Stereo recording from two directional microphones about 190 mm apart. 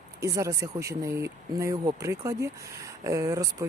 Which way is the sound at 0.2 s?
15° right (ahead or behind).